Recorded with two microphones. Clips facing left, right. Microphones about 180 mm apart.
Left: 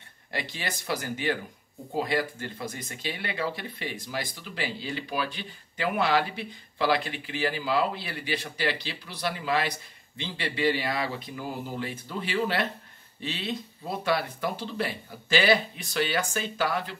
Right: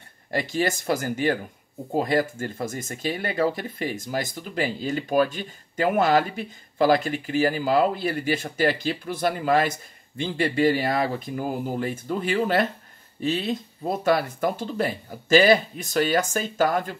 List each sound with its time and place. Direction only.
0.3 s speech: 45° right (ahead or behind)